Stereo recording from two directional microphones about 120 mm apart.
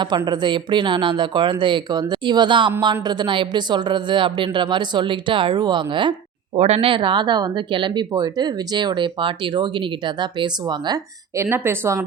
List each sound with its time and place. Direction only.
0.3 s speech: 40° right (ahead or behind)
6.6 s speech: 55° right (ahead or behind); by 11.0 s 35° right (ahead or behind)
11.3 s speech: 20° right (ahead or behind)